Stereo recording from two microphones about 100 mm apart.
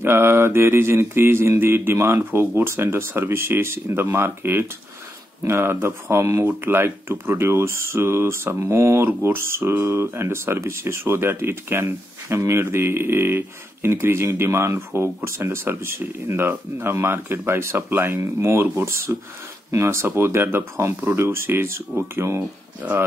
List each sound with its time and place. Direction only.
0.0 s speech: 25° right (ahead or behind)